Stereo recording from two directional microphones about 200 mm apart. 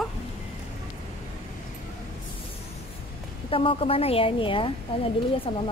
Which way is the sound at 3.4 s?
25° left (ahead or behind).